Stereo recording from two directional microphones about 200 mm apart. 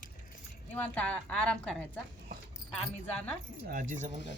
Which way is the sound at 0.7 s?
5° left (ahead or behind).